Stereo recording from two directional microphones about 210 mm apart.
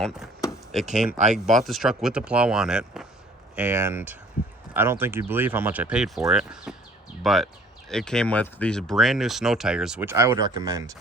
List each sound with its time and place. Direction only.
1.2 s speech: 35° right (ahead or behind)
1.5 s speech: centre (ahead or behind); by 10.9 s 15° right (ahead or behind)